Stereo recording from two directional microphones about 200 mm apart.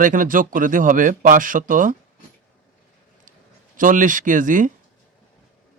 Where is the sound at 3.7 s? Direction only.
40° right (ahead or behind).